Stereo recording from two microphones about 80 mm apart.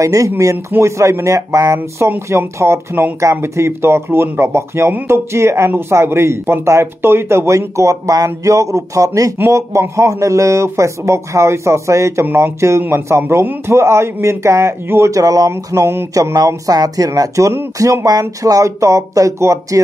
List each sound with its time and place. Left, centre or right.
0.0 s speech: right
15.5 s speech: right
16.3 s speech: right